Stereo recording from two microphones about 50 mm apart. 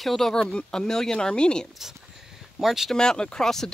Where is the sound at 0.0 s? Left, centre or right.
Centre.